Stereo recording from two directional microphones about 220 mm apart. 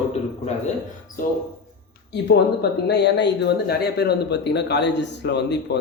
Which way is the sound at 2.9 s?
50° left (ahead or behind).